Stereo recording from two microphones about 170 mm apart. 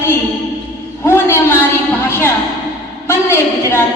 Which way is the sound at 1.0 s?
15° left (ahead or behind).